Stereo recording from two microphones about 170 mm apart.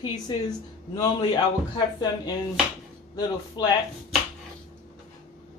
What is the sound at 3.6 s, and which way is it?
Speech, 25° left (ahead or behind).